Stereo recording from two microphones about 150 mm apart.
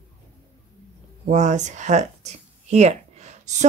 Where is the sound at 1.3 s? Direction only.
50° right (ahead or behind).